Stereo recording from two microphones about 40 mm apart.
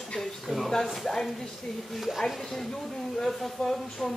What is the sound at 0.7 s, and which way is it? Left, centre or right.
Speech, centre.